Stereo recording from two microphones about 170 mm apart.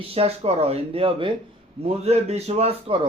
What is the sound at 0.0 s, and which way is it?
Speech, 35° right (ahead or behind).